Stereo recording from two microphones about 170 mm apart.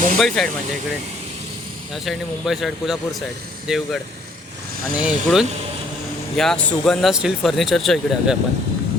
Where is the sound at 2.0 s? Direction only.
Centre (ahead or behind).